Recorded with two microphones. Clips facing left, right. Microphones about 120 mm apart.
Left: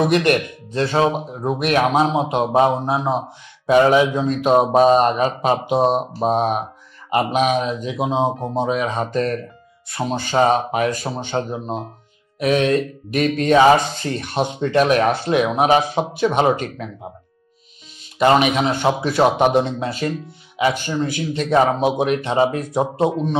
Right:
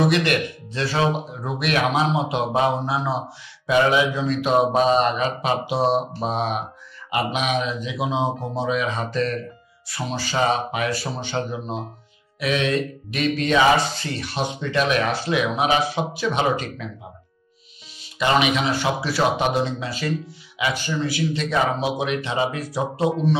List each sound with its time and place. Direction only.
0.1 s speech: 45° left (ahead or behind)
3.6 s speech: 40° left (ahead or behind)
18.2 s speech: 45° left (ahead or behind)